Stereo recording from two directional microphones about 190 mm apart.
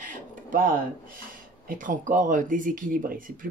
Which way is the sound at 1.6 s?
45° right (ahead or behind).